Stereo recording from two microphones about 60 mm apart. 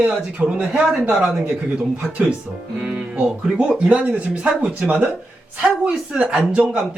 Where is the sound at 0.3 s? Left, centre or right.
Centre.